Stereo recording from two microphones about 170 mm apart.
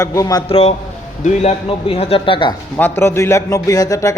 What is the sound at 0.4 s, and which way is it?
Speech, 35° left (ahead or behind).